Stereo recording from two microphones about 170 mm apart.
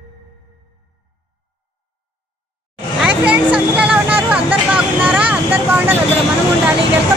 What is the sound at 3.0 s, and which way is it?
Vehicle, 5° right (ahead or behind).